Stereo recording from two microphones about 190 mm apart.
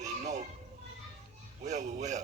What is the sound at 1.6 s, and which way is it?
Speech, 40° right (ahead or behind).